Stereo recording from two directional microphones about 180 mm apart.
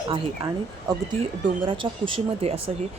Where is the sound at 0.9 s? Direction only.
20° right (ahead or behind).